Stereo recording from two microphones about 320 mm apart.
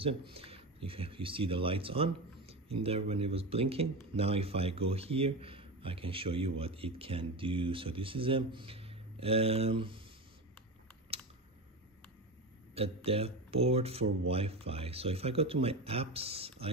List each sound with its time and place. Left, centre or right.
0.0 s speech: centre
11.1 s typing: centre
12.7 s speech: centre